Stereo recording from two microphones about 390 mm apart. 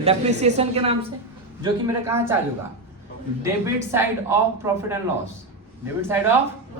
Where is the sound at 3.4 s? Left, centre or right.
Centre.